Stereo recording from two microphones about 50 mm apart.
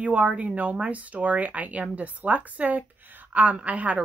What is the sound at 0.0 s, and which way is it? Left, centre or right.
A woman's voice, right.